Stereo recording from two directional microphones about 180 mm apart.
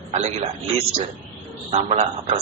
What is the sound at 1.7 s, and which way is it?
Speech, 35° right (ahead or behind).